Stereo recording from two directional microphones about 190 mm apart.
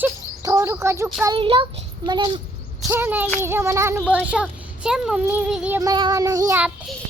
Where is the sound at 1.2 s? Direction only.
25° right (ahead or behind).